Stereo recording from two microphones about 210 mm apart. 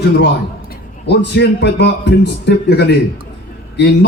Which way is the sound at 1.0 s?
55° left (ahead or behind).